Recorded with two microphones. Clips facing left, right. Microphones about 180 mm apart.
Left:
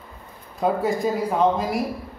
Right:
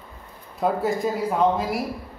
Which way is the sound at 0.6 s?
Centre (ahead or behind).